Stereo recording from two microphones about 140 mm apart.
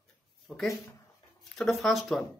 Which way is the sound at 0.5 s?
Centre (ahead or behind).